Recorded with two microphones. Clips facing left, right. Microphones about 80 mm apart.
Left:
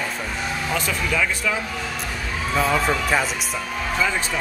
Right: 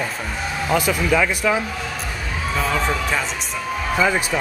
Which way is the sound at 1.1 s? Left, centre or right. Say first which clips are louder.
Right 5 dB; right.